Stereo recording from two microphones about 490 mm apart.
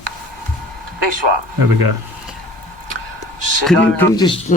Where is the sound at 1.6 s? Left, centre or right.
Right.